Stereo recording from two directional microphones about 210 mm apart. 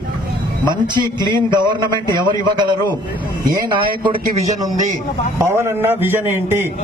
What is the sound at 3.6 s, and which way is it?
Speech, 25° right (ahead or behind).